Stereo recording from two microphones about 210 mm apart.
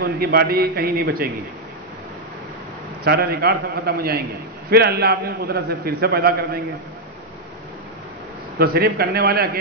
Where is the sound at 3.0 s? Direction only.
50° right (ahead or behind).